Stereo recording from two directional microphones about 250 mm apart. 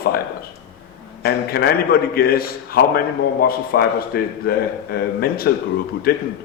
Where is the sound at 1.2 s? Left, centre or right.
Left.